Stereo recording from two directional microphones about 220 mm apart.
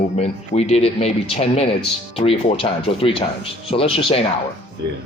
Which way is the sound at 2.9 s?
25° left (ahead or behind).